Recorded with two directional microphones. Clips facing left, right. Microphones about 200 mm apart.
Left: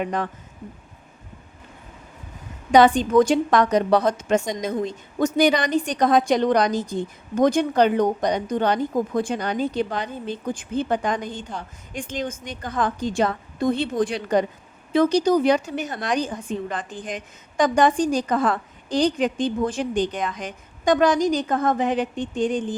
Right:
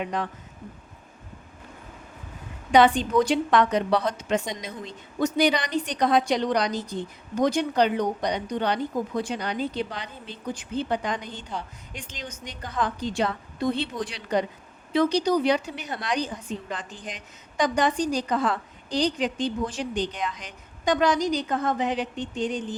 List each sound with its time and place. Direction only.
0.0 s a woman's voice: 50° left (ahead or behind)
2.7 s a woman's voice: 45° left (ahead or behind)